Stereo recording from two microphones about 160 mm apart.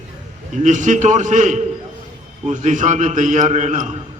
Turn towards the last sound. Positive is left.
turn(degrees=-45)  # may be behind; listen again after turning